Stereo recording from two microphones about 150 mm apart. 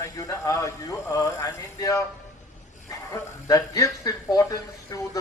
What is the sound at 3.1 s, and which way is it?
Speech, 25° left (ahead or behind).